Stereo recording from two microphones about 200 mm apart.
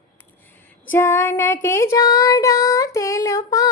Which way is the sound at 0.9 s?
10° left (ahead or behind).